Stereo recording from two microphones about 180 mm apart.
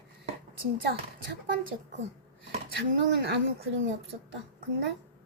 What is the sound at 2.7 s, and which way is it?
Speech, 75° right (ahead or behind).